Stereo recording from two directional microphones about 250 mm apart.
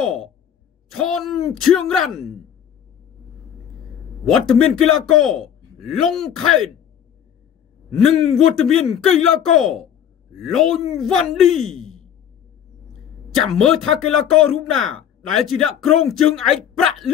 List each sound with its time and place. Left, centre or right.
0.0 s a sound: centre
0.8 s speech: centre
4.3 s speech: centre
8.0 s speech: centre
13.3 s speech: centre